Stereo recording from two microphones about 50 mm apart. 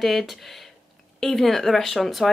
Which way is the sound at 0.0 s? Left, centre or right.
Centre.